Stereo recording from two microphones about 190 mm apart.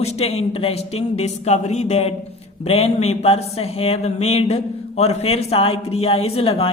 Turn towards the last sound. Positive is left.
turn(degrees=30)  # may be behind; listen again after turning